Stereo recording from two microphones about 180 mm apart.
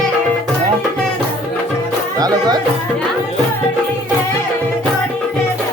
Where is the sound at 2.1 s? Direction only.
20° right (ahead or behind).